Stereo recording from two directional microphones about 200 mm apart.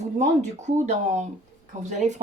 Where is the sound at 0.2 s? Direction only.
35° right (ahead or behind).